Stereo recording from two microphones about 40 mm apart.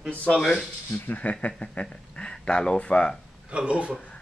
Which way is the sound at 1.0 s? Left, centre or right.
Left.